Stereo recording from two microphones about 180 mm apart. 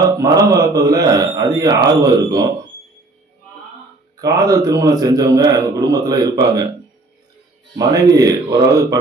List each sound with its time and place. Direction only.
0.2 s a man's voice: 20° right (ahead or behind)
4.2 s a man's voice: 20° right (ahead or behind)
7.8 s a man's voice: 20° right (ahead or behind)